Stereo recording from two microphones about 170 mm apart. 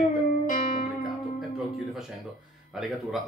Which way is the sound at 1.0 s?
Centre (ahead or behind).